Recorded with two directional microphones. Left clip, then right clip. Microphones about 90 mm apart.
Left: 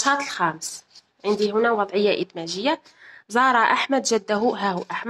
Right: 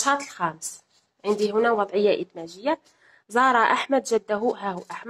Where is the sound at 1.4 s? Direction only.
5° left (ahead or behind).